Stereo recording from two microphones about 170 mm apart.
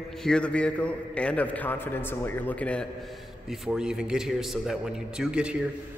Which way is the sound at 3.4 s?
5° right (ahead or behind).